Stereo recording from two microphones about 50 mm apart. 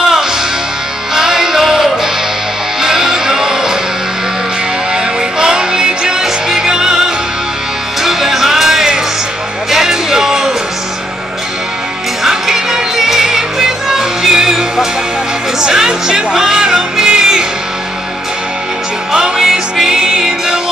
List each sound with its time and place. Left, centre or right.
1.1 s music: centre
4.9 s music: centre
8.0 s music: centre
12.2 s music: centre
19.1 s music: centre